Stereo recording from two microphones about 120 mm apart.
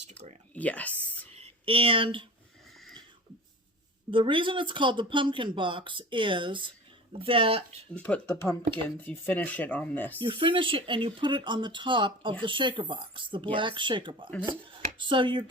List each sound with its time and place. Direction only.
0.1 s speech: 65° right (ahead or behind)
0.5 s speech: 10° left (ahead or behind)
1.3 s a sound: 60° right (ahead or behind)
4.1 s speech: 45° right (ahead or behind)
7.9 s speech: 10° left (ahead or behind)
10.2 s speech: 45° right (ahead or behind)